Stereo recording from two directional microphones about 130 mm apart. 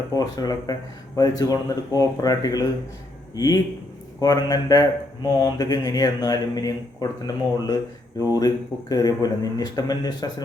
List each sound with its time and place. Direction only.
0.1 s speech: 30° left (ahead or behind)